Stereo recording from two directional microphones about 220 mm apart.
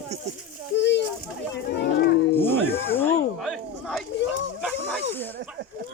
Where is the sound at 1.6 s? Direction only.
45° left (ahead or behind).